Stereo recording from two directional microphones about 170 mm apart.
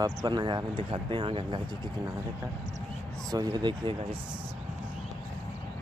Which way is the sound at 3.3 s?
25° right (ahead or behind).